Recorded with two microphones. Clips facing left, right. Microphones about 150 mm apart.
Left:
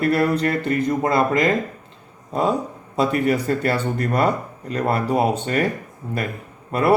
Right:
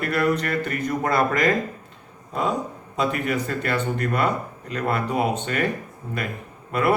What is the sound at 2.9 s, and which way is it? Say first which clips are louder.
Speech: left 5 dB; 35° left (ahead or behind).